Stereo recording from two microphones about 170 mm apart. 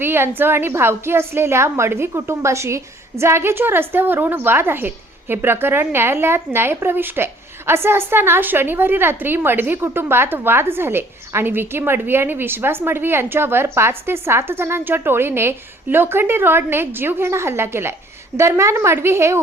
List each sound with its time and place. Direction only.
0.0 s a woman's voice: 15° right (ahead or behind)